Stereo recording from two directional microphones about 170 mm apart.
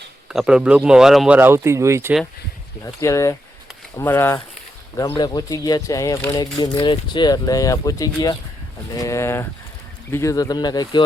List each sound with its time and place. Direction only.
0.3 s speech: 5° right (ahead or behind)
1.4 s speech: 15° right (ahead or behind)
2.8 s speech: 15° left (ahead or behind)
4.9 s speech: 25° left (ahead or behind)